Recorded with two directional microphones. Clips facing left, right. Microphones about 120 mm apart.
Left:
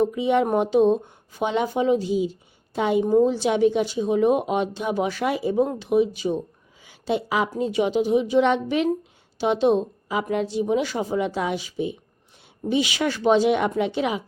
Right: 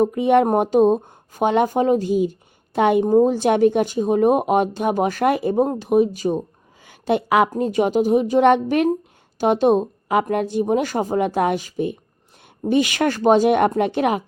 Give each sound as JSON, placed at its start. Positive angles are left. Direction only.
{"t": 0.0, "sound": "speech", "side_deg": -50}
{"t": 3.0, "sound": "speech", "side_deg": -45}
{"t": 6.8, "sound": "speech", "side_deg": -55}